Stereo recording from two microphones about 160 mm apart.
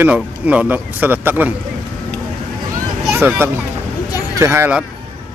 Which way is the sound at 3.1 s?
15° right (ahead or behind).